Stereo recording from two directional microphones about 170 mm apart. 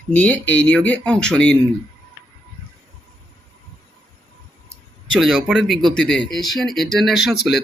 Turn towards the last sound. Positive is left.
turn(degrees=0)  # may be behind; listen again after turning